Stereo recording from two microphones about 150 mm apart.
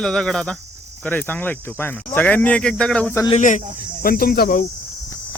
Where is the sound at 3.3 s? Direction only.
55° left (ahead or behind).